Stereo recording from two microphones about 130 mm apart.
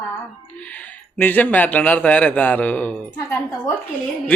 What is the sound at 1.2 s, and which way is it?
Speech, 15° left (ahead or behind).